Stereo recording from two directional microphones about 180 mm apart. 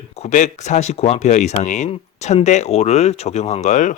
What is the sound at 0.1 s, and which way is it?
Speech, 40° left (ahead or behind).